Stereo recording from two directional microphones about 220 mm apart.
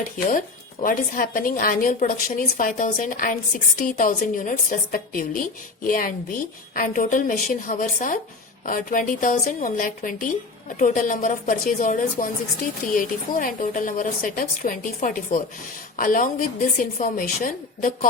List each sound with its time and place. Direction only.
0.3 s a woman's voice: 35° left (ahead or behind)